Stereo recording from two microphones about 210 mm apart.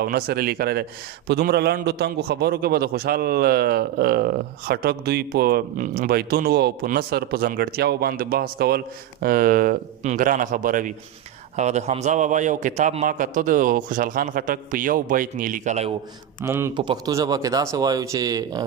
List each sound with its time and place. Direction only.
0.0 s a man's voice: 45° right (ahead or behind)
16.4 s speech: 10° right (ahead or behind)